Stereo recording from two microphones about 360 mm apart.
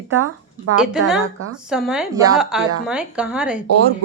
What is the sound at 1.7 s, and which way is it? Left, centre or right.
A woman's voice, centre.